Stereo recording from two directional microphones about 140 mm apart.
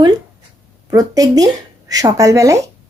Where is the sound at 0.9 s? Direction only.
25° right (ahead or behind).